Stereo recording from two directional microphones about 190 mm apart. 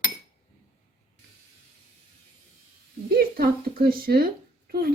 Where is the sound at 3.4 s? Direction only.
50° right (ahead or behind).